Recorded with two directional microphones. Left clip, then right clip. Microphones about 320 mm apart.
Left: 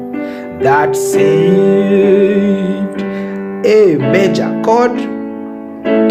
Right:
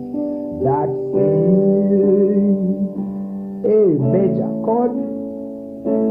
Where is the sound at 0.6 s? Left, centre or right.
Centre.